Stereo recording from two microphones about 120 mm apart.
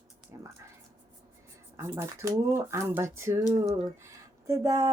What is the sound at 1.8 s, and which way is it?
Speech, 20° right (ahead or behind).